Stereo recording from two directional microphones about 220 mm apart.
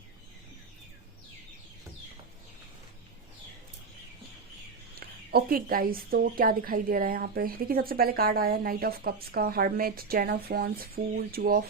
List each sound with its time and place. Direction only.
4.9 s speech: 45° right (ahead or behind)